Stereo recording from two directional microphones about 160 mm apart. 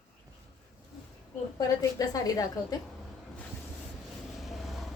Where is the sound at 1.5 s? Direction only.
20° left (ahead or behind).